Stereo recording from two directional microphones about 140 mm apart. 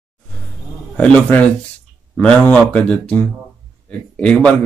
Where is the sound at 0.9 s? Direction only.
10° left (ahead or behind).